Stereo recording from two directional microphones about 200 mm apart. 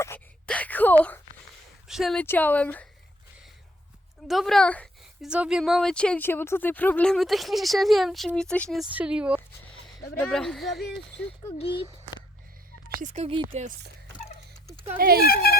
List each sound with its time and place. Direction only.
0.0 s wail: 10° left (ahead or behind)
1.9 s speech: centre (ahead or behind)
4.3 s a woman's voice: centre (ahead or behind)
5.3 s speech: 5° right (ahead or behind)
13.0 s speech: 35° right (ahead or behind)
14.9 s speech: 50° right (ahead or behind)
15.3 s speech: 50° left (ahead or behind)